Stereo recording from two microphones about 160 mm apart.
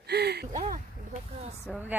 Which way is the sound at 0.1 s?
90° right.